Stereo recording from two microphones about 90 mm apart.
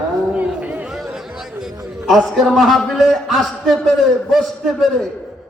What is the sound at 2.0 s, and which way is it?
A man's voice, centre (ahead or behind).